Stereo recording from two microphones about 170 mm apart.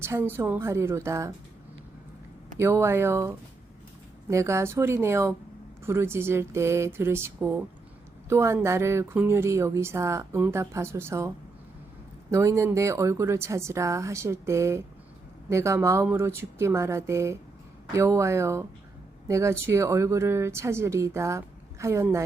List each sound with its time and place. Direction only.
0.0 s speech: 15° right (ahead or behind)
2.6 s speech: 15° right (ahead or behind)
12.3 s speech: 15° right (ahead or behind)